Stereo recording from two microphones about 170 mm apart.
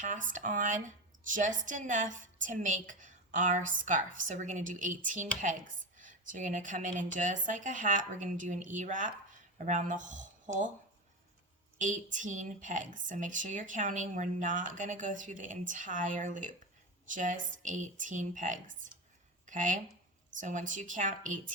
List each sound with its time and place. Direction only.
0.0 s speech: 50° right (ahead or behind)
12.1 s speech: 45° right (ahead or behind)